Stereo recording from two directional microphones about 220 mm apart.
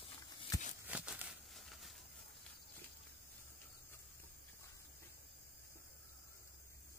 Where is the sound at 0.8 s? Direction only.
5° right (ahead or behind).